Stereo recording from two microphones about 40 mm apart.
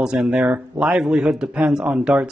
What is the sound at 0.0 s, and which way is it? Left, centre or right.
A man's voice, centre.